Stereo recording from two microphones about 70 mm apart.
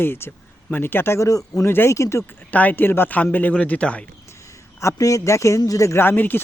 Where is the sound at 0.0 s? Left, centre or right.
Left.